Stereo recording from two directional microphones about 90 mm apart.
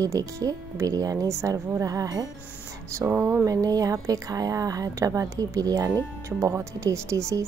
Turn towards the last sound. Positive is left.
turn(degrees=-35)  # may be behind; listen again after turning